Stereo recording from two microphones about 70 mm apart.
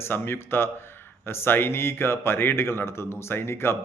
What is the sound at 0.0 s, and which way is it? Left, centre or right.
Speech, left.